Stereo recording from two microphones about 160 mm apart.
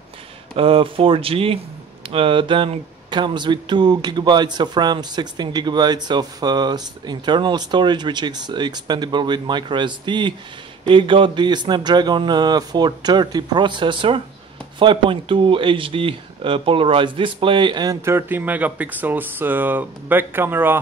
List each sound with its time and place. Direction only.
0.6 s speech: 35° right (ahead or behind)
18.0 s speech: 15° right (ahead or behind)